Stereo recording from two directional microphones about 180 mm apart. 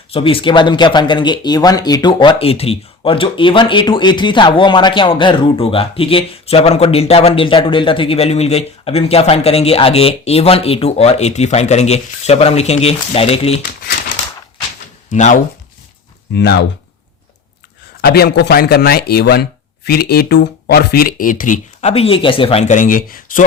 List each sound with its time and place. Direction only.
0.1 s speech: 30° left (ahead or behind)
15.1 s speech: 45° left (ahead or behind)
16.3 s speech: 70° left (ahead or behind)
18.0 s speech: 60° left (ahead or behind)